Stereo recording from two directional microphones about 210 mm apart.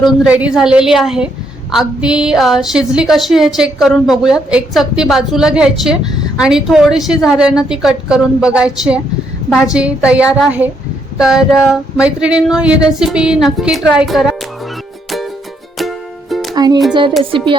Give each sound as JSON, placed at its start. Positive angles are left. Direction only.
{"t": 0.3, "sound": "a woman's voice", "side_deg": -5}
{"t": 16.6, "sound": "music", "side_deg": -20}